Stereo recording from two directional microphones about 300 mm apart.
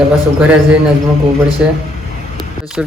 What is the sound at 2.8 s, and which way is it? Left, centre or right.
Speech, centre.